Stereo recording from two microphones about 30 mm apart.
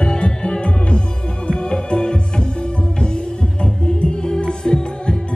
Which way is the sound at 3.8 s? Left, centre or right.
Left.